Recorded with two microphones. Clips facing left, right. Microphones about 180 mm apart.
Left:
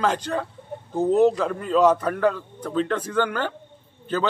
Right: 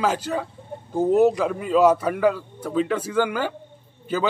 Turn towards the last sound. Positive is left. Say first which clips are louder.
# even
turn(degrees=-10)  # may be behind; listen again after turning